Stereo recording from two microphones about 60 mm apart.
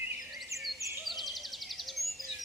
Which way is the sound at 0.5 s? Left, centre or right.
Right.